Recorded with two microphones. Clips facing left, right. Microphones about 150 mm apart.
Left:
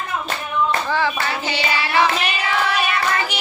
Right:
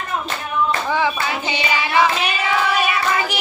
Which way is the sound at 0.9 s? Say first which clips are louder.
Right 1 dB; 15° right (ahead or behind).